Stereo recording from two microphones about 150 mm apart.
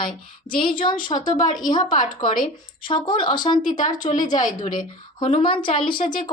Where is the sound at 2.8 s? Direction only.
35° left (ahead or behind).